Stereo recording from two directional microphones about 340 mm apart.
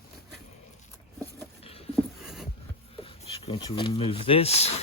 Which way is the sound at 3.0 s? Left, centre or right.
Centre.